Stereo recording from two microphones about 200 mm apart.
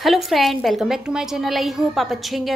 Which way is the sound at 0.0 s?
Centre (ahead or behind).